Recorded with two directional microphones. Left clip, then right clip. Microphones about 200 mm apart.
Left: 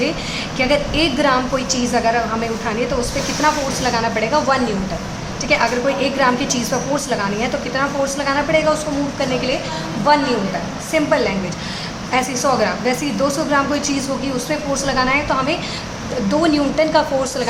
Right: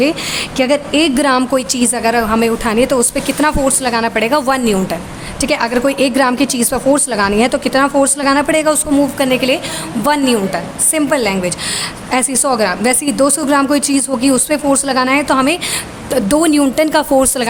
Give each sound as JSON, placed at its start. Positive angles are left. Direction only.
{"t": 0.5, "sound": "a woman's voice", "side_deg": -60}
{"t": 10.9, "sound": "a woman's voice", "side_deg": -60}